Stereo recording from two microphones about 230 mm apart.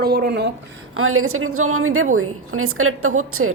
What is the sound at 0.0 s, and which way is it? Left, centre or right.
Speech, right.